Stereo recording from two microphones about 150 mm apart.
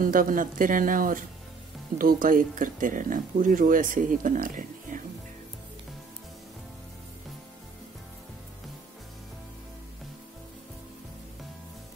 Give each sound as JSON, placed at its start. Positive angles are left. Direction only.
{"t": 0.0, "sound": "speech", "side_deg": -65}